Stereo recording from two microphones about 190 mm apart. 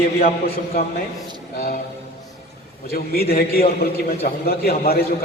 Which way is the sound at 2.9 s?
55° left (ahead or behind).